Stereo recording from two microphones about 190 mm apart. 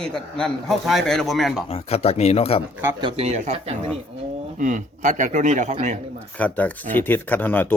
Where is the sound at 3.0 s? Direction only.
35° right (ahead or behind).